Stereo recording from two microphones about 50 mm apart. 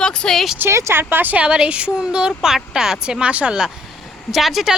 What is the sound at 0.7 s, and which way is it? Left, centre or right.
Speech, right.